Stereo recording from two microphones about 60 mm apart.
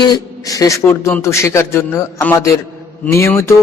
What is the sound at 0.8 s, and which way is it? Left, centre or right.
A man's voice, left.